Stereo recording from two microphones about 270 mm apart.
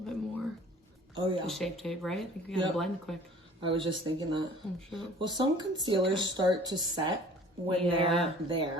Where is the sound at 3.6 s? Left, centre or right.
Centre.